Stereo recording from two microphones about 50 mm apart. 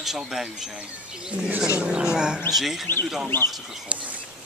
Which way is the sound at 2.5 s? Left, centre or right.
Centre.